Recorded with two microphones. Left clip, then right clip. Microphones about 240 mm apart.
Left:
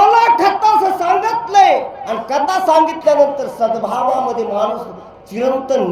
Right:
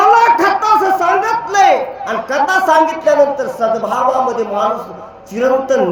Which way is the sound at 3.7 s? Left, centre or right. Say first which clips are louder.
Right 2 dB; centre.